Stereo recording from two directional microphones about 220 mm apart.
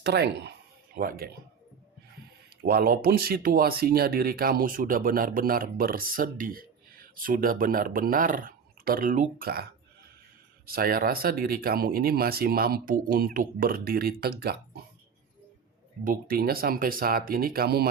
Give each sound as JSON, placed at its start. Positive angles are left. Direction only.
{"t": 0.0, "sound": "speech", "side_deg": -50}
{"t": 2.6, "sound": "speech", "side_deg": -40}
{"t": 10.7, "sound": "speech", "side_deg": -45}
{"t": 16.0, "sound": "speech", "side_deg": -40}